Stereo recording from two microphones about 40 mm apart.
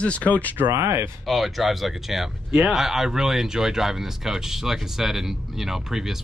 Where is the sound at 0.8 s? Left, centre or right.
Right.